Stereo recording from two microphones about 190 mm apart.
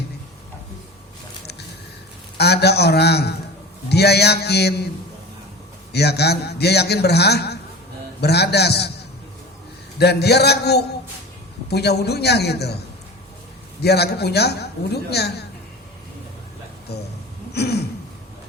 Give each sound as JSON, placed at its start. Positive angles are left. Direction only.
{"t": 2.4, "sound": "a man's voice", "side_deg": 60}
{"t": 5.9, "sound": "a man's voice", "side_deg": 60}
{"t": 10.0, "sound": "a man's voice", "side_deg": 60}
{"t": 13.8, "sound": "a man's voice", "side_deg": 60}
{"t": 16.9, "sound": "a man's voice", "side_deg": 60}